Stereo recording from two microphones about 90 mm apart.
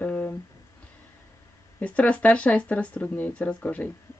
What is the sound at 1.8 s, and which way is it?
Speech, 15° left (ahead or behind).